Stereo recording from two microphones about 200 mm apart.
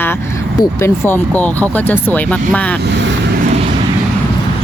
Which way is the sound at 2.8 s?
60° right (ahead or behind).